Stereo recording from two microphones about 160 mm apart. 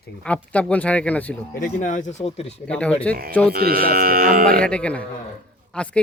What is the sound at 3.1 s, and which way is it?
Speech, 70° right (ahead or behind).